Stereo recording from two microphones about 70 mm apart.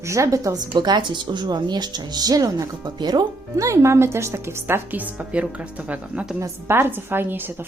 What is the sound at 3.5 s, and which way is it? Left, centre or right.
Speech, right.